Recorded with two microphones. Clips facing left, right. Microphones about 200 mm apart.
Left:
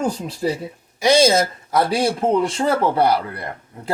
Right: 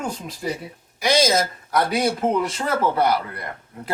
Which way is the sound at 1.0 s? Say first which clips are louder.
Left 4 dB; 30° left (ahead or behind).